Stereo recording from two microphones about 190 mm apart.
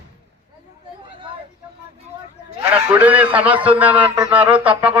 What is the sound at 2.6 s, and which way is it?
A man's voice, 10° right (ahead or behind).